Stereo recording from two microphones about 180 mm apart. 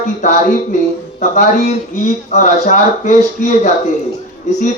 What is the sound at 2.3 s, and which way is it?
Speech, 45° left (ahead or behind).